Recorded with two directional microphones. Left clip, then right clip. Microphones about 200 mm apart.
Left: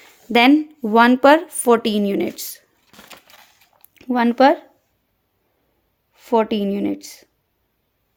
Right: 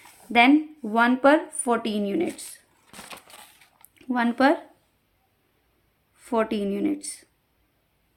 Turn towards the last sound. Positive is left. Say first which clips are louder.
# left 3 dB
turn(degrees=35)  # may be behind; listen again after turning